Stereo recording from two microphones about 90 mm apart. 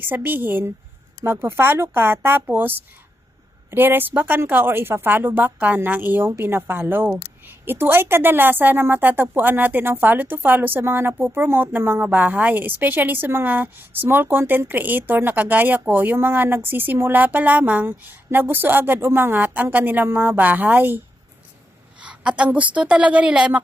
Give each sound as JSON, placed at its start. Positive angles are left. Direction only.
{"t": 0.0, "sound": "a woman's voice", "side_deg": -20}
{"t": 22.0, "sound": "a woman's voice", "side_deg": -10}